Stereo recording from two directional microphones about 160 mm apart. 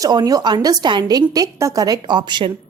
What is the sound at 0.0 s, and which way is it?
Speech, 25° right (ahead or behind).